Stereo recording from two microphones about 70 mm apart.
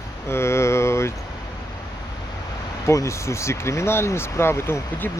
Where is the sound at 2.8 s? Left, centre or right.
Left.